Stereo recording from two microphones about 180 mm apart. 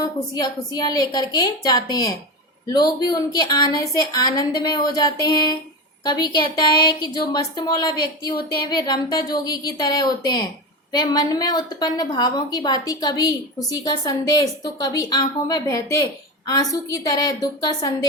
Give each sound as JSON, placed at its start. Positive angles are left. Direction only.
{"t": 0.0, "sound": "a woman's voice", "side_deg": 20}